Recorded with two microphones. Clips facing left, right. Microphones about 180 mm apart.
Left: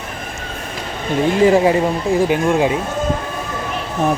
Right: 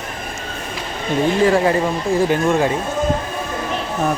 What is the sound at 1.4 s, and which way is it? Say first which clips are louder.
Speech: left 5 dB; 20° left (ahead or behind).